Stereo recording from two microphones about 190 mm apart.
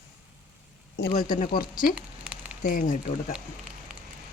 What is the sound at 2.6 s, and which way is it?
Speech, 45° left (ahead or behind).